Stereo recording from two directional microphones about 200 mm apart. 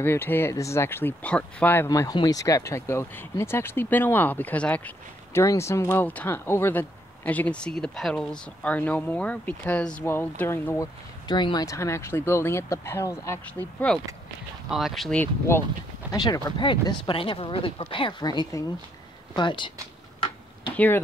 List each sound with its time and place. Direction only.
0.0 s speech: 10° left (ahead or behind)
13.9 s speech: centre (ahead or behind)
16.1 s speech: 20° left (ahead or behind)
20.7 s speech: 10° left (ahead or behind)